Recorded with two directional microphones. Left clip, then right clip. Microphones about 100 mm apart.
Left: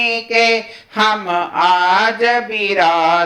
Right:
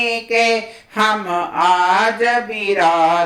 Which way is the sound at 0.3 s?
25° left (ahead or behind).